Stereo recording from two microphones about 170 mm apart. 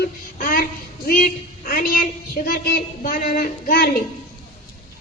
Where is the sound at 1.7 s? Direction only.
55° left (ahead or behind).